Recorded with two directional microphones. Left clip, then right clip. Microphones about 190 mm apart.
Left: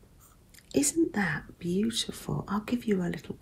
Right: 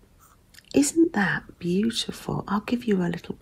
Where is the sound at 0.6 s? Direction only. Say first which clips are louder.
Right 6 dB; 40° right (ahead or behind).